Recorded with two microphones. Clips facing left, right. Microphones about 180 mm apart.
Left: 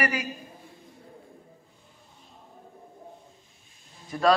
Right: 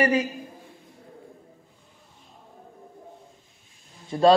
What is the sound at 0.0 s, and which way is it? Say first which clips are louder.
Speech: right 7 dB; 25° right (ahead or behind).